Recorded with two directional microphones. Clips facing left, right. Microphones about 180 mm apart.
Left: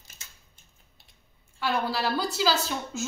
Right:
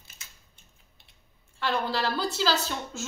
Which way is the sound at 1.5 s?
10° left (ahead or behind).